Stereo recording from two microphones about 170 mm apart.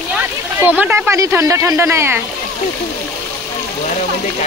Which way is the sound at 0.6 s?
10° right (ahead or behind).